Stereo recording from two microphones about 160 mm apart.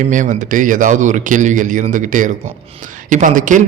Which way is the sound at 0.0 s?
50° right (ahead or behind).